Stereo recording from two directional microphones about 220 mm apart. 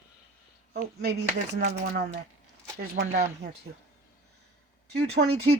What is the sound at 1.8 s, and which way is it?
Speech, 50° right (ahead or behind).